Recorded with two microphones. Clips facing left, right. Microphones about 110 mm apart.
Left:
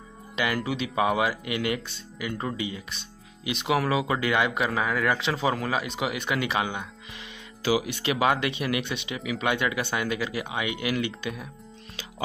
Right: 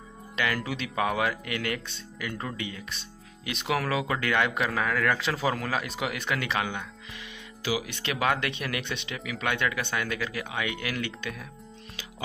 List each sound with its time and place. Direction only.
0.6 s speech: 5° left (ahead or behind)